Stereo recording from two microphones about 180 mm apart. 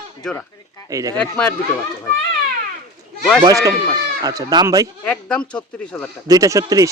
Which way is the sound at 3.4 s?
20° right (ahead or behind).